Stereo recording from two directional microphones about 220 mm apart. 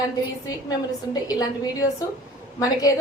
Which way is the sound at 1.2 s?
15° left (ahead or behind).